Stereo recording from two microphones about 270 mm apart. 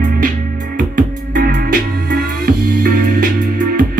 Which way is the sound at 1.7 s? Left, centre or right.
Right.